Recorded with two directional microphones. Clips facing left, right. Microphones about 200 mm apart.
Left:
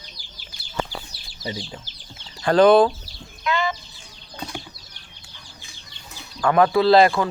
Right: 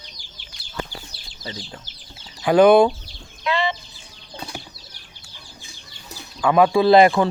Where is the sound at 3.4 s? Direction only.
30° right (ahead or behind).